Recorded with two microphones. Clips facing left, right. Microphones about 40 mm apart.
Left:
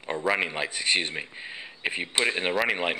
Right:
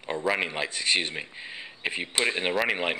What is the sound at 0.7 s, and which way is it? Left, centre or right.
Speech, centre.